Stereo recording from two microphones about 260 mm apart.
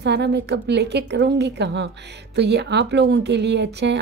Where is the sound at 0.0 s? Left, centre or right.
Right.